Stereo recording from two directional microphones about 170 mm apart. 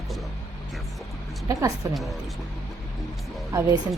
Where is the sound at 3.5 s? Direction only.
20° right (ahead or behind).